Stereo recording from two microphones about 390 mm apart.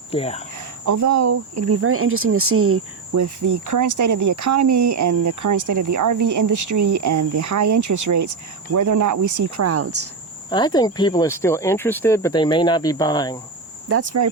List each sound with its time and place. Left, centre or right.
0.1 s speech: centre
0.9 s speech: right
3.2 s speech: right
10.5 s speech: centre
13.8 s speech: right